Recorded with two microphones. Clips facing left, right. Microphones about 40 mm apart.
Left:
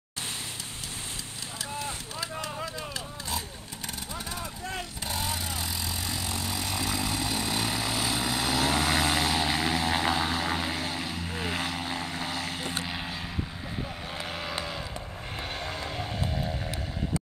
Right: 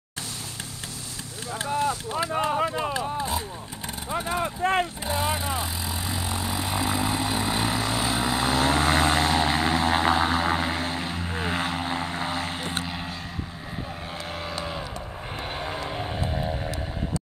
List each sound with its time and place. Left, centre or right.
1.7 s a sound: right
3.2 s a sound: right
4.1 s vehicle: right
5.0 s vehicle: right
12.8 s vehicle: centre
15.5 s vehicle: centre